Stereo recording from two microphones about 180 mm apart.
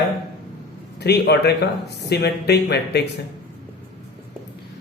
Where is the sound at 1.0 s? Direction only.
65° left (ahead or behind).